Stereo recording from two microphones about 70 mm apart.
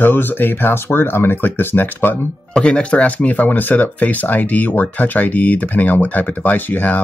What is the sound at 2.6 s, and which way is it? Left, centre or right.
Speech, centre.